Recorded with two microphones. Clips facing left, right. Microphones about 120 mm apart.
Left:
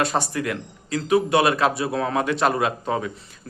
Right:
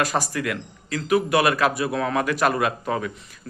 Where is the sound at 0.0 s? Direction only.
30° left (ahead or behind).